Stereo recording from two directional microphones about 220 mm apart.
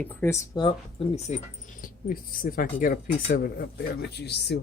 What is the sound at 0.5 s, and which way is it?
Speech, 25° left (ahead or behind).